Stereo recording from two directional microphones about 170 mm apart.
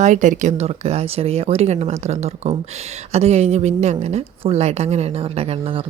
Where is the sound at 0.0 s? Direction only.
45° right (ahead or behind).